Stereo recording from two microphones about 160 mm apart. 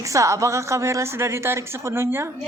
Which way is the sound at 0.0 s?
20° right (ahead or behind).